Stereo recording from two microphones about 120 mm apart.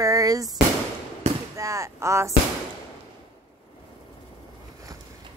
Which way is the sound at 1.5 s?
25° right (ahead or behind).